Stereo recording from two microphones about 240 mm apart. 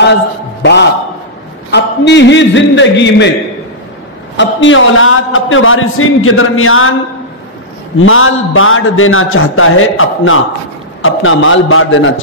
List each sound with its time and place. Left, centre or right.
0.6 s a man's voice: left
4.4 s a man's voice: left
8.0 s a man's voice: left